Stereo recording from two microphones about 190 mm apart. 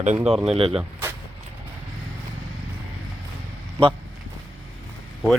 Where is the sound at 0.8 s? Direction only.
10° right (ahead or behind).